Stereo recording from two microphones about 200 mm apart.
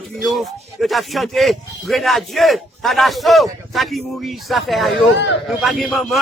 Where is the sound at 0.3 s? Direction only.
Centre (ahead or behind).